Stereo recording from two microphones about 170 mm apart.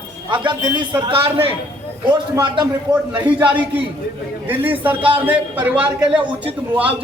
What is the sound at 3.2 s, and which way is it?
A man's voice, 10° right (ahead or behind).